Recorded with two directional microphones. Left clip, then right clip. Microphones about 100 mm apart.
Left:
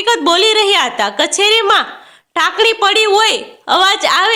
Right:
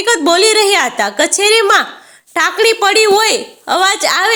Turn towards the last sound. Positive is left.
turn(degrees=-50)  # may be behind; listen again after turning